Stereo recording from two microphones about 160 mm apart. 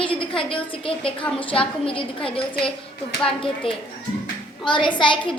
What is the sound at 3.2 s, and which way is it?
A woman's voice, 35° left (ahead or behind).